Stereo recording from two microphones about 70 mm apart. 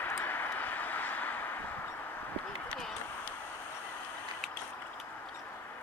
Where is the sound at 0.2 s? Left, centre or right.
Left.